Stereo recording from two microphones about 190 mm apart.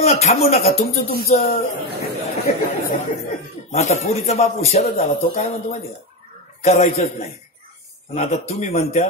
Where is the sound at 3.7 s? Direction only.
35° left (ahead or behind).